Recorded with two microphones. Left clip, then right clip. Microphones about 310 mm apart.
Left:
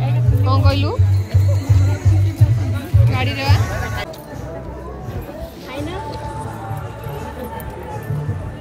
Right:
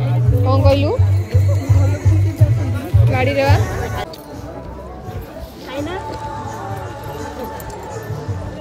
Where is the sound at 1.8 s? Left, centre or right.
Centre.